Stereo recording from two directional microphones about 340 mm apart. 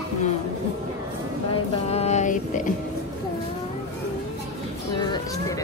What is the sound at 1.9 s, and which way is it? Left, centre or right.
Music, centre.